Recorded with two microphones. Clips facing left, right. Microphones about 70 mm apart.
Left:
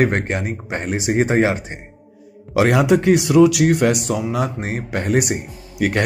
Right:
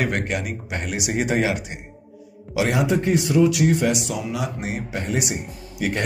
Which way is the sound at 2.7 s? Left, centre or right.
Left.